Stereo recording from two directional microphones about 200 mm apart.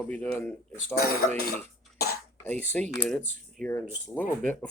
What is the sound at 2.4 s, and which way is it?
Speech, 10° left (ahead or behind).